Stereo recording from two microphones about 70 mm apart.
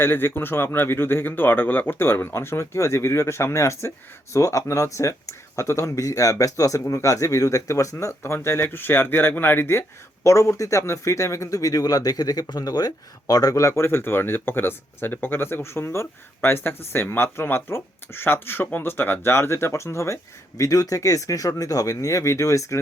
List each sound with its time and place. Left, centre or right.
0.0 s speech: left
10.2 s speech: left
20.6 s speech: left